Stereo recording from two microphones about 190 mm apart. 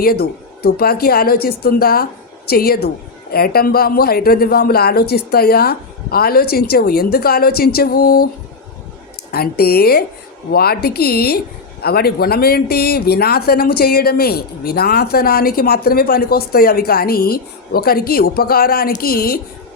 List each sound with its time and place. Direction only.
0.0 s a man's voice: 55° left (ahead or behind)
9.3 s a man's voice: 55° left (ahead or behind)